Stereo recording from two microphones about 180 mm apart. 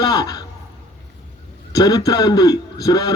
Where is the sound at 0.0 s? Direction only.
20° left (ahead or behind).